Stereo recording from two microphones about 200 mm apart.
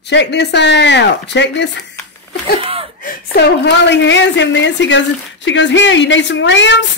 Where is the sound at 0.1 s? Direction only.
60° left (ahead or behind).